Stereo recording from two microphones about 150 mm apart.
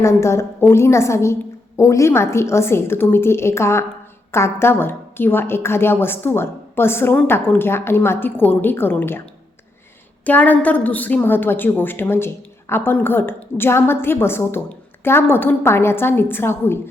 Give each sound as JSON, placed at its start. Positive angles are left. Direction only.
{"t": 0.0, "sound": "a woman's voice", "side_deg": 20}
{"t": 10.2, "sound": "a woman's voice", "side_deg": 10}